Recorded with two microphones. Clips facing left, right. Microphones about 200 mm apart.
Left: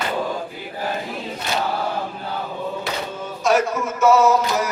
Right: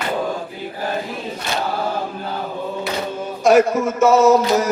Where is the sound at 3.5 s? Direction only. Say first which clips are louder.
Right 6 dB; 50° right (ahead or behind).